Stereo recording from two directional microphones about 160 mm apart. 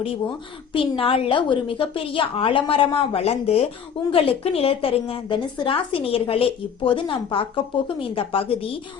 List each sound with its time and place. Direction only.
0.7 s a woman's voice: 35° left (ahead or behind)